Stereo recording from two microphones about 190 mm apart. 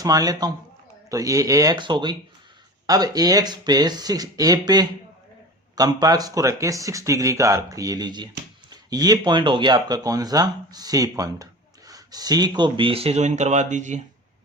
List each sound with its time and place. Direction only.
0.0 s speech: 20° right (ahead or behind); by 14.0 s 40° right (ahead or behind)